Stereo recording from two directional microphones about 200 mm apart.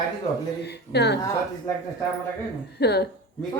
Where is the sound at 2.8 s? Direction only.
55° left (ahead or behind).